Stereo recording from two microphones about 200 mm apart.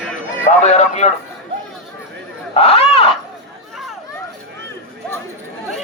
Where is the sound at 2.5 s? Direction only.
30° left (ahead or behind).